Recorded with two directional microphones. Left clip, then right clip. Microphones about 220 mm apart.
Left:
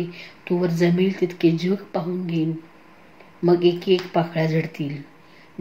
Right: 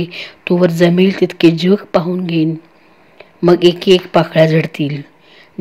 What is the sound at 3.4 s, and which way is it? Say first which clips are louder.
Speech: right 8 dB; 40° right (ahead or behind).